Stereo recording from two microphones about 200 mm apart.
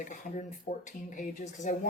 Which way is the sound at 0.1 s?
40° left (ahead or behind).